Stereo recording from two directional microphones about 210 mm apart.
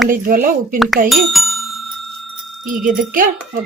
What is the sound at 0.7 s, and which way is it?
Speech, centre (ahead or behind).